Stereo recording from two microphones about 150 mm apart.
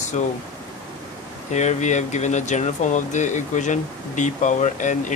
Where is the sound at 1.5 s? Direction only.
50° left (ahead or behind).